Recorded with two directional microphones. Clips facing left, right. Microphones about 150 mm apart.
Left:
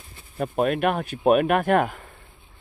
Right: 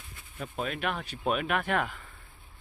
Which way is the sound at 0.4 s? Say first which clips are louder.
Left 11 dB; 55° left (ahead or behind).